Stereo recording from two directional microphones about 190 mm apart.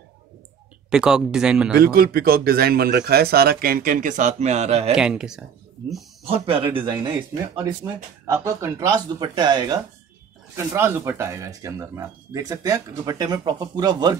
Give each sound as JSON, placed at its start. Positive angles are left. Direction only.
{"t": 0.8, "sound": "speech", "side_deg": -5}
{"t": 1.8, "sound": "speech", "side_deg": -50}
{"t": 4.9, "sound": "speech", "side_deg": -5}
{"t": 6.2, "sound": "speech", "side_deg": -30}